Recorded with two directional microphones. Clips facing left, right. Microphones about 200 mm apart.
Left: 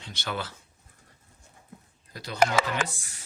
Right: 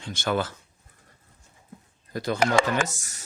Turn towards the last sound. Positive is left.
turn(degrees=-45)  # may be behind; listen again after turning